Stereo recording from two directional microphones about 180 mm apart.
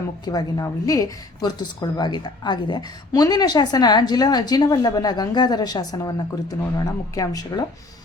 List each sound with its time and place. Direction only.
0.3 s a woman's voice: 20° left (ahead or behind)